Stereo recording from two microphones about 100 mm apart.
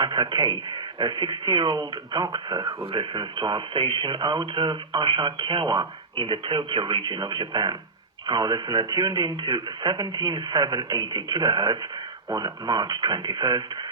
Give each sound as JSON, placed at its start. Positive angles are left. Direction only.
{"t": 0.0, "sound": "speech", "side_deg": -50}
{"t": 2.8, "sound": "speech", "side_deg": -55}